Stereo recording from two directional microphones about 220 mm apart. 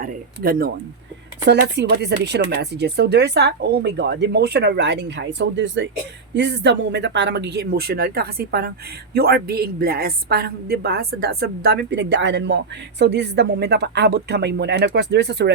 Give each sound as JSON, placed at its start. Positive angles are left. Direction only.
{"t": 0.0, "sound": "speech", "side_deg": -40}
{"t": 1.7, "sound": "a woman's voice", "side_deg": -50}